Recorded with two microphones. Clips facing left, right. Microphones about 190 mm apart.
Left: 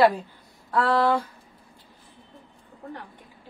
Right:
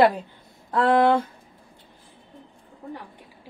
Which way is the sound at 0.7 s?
20° right (ahead or behind).